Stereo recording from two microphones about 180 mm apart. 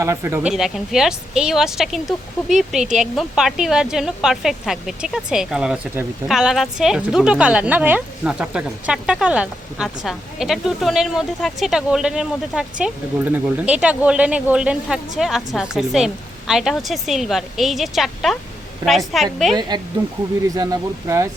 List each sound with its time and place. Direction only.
0.0 s speech: 15° right (ahead or behind); by 19.5 s centre (ahead or behind)
19.5 s speech: 25° right (ahead or behind)